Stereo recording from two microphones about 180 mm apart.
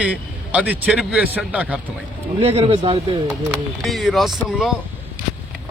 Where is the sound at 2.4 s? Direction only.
30° right (ahead or behind).